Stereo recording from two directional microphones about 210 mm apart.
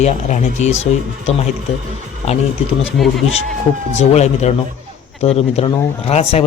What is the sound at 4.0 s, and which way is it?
A man's voice, 30° left (ahead or behind).